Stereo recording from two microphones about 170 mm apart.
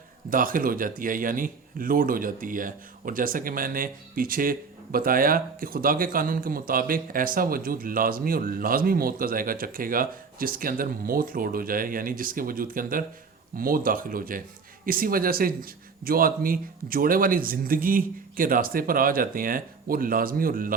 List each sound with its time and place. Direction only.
0.3 s speech: 55° right (ahead or behind)